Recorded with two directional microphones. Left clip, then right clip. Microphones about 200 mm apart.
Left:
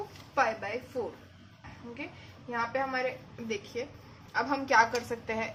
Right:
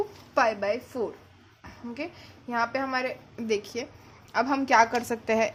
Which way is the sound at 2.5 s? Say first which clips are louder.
Right 4 dB; 45° right (ahead or behind).